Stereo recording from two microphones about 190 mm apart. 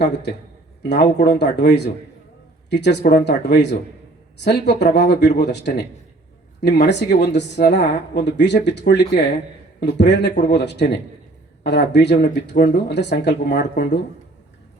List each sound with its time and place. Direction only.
0.0 s a woman's voice: 60° left (ahead or behind)